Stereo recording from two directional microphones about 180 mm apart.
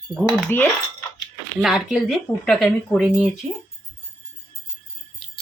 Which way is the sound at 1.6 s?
Centre (ahead or behind).